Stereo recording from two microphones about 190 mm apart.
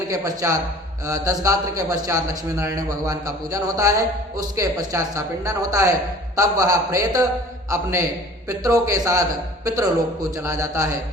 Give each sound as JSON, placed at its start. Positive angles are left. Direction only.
{"t": 0.1, "sound": "a man's voice", "side_deg": -15}
{"t": 10.3, "sound": "a man's voice", "side_deg": -15}